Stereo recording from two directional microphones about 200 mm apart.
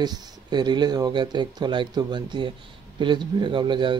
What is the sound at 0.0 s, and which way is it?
Speech, 20° right (ahead or behind).